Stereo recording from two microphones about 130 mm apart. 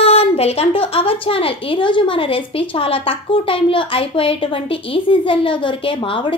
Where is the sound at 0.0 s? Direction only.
50° left (ahead or behind).